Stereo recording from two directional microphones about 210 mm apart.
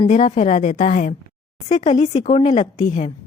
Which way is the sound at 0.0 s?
30° left (ahead or behind).